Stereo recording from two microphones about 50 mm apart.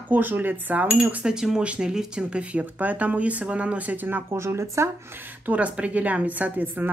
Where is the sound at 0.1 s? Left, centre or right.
Right.